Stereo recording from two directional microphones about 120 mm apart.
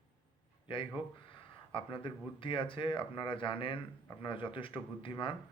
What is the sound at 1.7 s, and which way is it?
Speech, 45° left (ahead or behind).